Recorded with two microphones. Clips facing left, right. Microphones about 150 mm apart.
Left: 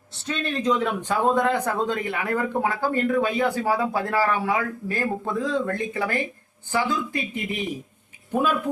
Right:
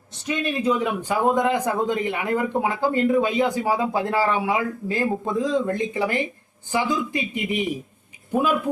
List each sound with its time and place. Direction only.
0.3 s a man's voice: 15° right (ahead or behind)